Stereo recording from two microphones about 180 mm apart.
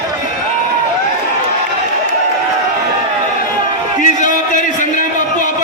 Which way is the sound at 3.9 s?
45° left (ahead or behind).